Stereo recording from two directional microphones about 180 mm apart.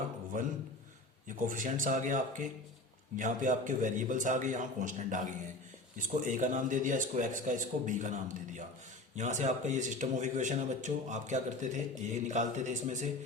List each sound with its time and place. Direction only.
0.3 s speech: 45° right (ahead or behind)